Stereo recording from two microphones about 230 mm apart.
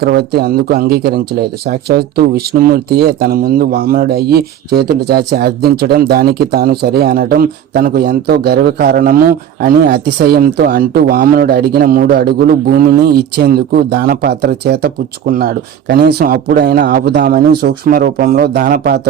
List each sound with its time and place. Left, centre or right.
0.0 s a man's voice: right